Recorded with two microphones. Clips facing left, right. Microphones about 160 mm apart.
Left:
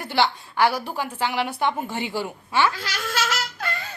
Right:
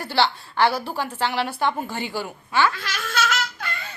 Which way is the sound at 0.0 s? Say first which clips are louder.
Even; 15° left (ahead or behind).